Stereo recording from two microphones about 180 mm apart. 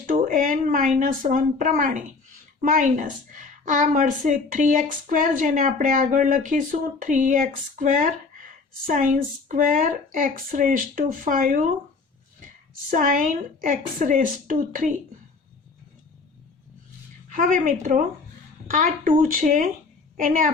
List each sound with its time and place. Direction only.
0.0 s a woman's voice: 50° right (ahead or behind)
12.9 s a woman's voice: 50° right (ahead or behind)
17.2 s a woman's voice: 50° right (ahead or behind)